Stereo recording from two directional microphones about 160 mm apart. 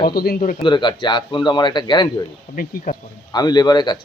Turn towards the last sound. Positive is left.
turn(degrees=25)  # may be behind; listen again after turning